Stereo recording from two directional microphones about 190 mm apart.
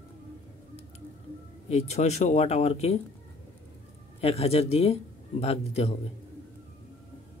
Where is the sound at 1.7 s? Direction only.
35° left (ahead or behind).